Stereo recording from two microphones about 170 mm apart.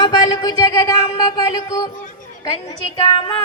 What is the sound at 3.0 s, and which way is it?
Speech, 30° left (ahead or behind).